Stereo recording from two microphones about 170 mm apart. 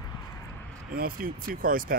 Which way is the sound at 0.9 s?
60° right (ahead or behind).